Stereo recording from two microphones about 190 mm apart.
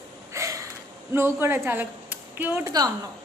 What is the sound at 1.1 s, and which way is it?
Speech, 15° right (ahead or behind).